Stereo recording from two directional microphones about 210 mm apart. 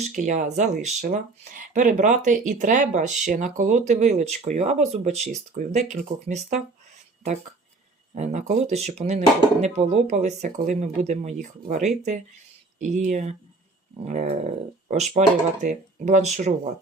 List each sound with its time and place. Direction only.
0.0 s speech: 35° right (ahead or behind)
8.1 s speech: 35° right (ahead or behind)